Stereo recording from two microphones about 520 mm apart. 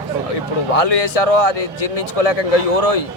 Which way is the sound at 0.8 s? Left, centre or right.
Left.